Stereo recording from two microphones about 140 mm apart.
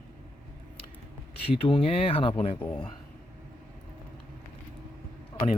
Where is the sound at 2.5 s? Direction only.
15° left (ahead or behind).